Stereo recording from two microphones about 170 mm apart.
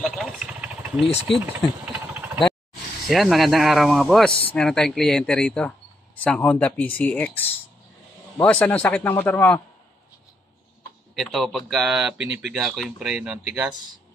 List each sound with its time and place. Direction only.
0.0 s engine: centre (ahead or behind)
1.3 s speech: 90° left
3.1 s speech: centre (ahead or behind)
11.1 s speech: centre (ahead or behind)